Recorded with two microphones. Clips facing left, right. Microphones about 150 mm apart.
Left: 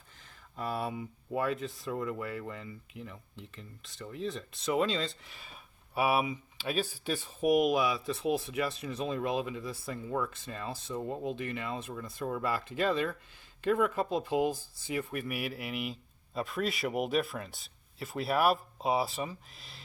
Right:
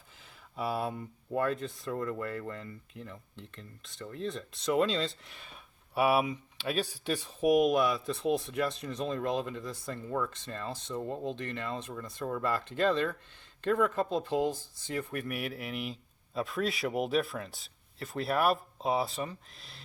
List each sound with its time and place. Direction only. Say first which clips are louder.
0.5 s speech: right 2 dB; 5° right (ahead or behind)